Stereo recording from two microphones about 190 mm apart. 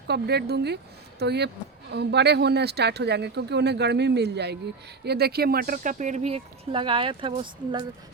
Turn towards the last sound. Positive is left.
turn(degrees=-25)  # may be behind; listen again after turning